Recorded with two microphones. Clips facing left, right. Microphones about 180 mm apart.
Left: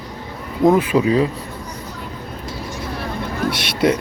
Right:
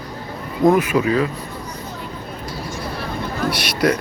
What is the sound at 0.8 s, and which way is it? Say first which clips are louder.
Speech: left 2 dB; 30° left (ahead or behind).